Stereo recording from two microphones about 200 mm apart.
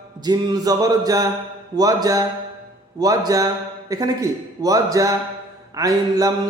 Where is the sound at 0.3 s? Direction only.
20° right (ahead or behind).